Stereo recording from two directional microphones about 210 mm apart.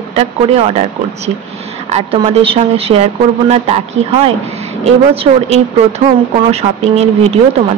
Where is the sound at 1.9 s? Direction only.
30° right (ahead or behind).